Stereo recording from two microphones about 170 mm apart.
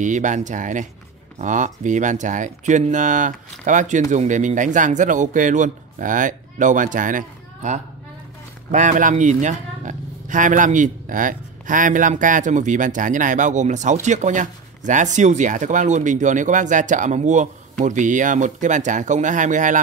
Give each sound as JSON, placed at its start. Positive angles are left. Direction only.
{"t": 0.0, "sound": "speech", "side_deg": -45}